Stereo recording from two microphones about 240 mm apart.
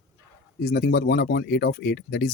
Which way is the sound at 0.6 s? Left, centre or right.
Left.